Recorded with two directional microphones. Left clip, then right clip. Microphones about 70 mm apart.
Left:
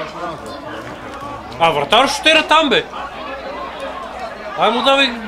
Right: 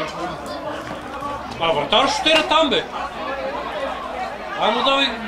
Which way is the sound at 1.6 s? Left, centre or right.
Left.